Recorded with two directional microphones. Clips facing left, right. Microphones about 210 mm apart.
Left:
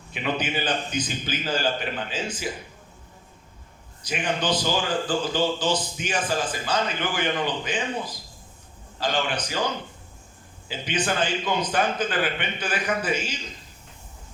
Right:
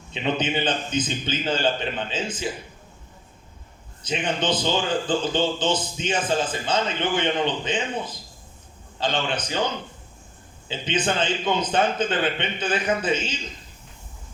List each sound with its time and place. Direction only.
0.1 s a man's voice: 25° right (ahead or behind)
4.0 s a man's voice: 20° right (ahead or behind)
10.7 s a man's voice: 25° right (ahead or behind)